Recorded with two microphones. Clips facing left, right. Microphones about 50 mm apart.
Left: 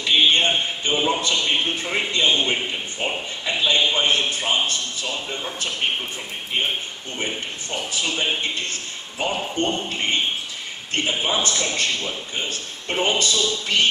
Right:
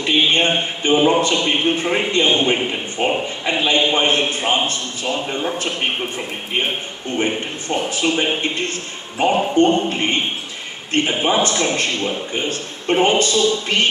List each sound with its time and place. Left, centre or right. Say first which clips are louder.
0.0 s a man's voice: right 2 dB; right
7.9 s a man's voice: right 4 dB; right
11.2 s a man's voice: right 6 dB; right